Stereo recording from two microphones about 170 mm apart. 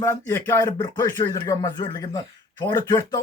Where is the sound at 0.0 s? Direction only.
15° left (ahead or behind).